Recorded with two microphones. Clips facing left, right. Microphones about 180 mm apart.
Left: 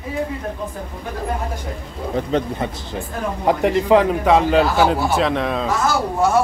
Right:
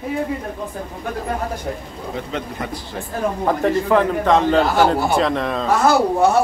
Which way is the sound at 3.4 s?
15° left (ahead or behind).